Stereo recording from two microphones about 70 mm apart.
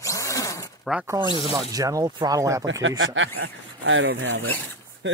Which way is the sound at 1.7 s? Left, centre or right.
Right.